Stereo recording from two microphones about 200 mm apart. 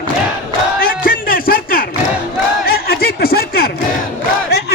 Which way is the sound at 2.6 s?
50° left (ahead or behind).